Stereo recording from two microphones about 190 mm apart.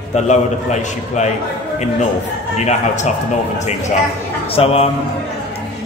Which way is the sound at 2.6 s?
35° left (ahead or behind).